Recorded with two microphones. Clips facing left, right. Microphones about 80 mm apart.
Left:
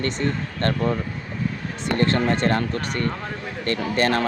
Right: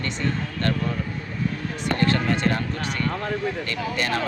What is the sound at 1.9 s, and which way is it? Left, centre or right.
Speech, left.